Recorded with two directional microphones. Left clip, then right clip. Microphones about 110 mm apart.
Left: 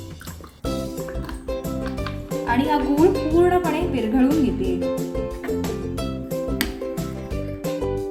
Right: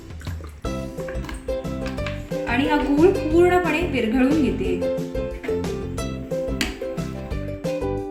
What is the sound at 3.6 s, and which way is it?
Speech, 10° right (ahead or behind).